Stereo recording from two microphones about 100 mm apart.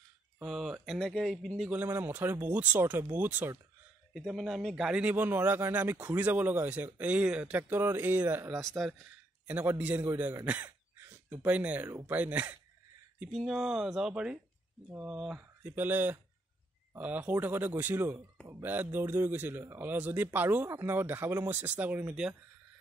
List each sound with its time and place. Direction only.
0.4 s speech: 5° right (ahead or behind)
1.7 s speech: 20° right (ahead or behind)
4.1 s speech: centre (ahead or behind)
5.0 s speech: 20° right (ahead or behind)
8.5 s speech: centre (ahead or behind)
9.5 s speech: 15° right (ahead or behind)
10.4 s a sound: 15° right (ahead or behind)
12.1 s speech: 15° right (ahead or behind)
13.3 s speech: 5° right (ahead or behind)
15.6 s speech: 20° right (ahead or behind)